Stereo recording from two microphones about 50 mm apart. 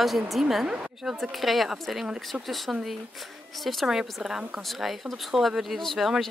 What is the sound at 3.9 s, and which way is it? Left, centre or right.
Speech, centre.